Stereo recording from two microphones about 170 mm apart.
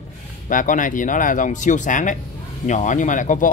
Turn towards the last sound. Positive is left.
turn(degrees=50)  # may be behind; listen again after turning